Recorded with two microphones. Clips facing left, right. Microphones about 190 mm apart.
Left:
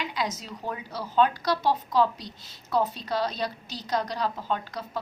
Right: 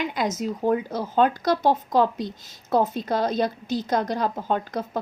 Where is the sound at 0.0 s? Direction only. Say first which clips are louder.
Right 6 dB; 50° right (ahead or behind).